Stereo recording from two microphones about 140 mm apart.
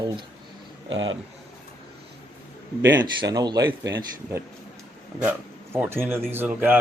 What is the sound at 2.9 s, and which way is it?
Speech, 30° right (ahead or behind).